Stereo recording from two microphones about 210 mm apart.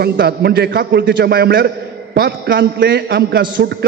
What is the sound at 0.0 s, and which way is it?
A man's voice, 50° right (ahead or behind).